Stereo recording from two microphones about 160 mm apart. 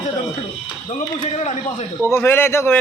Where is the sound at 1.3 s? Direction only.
45° left (ahead or behind).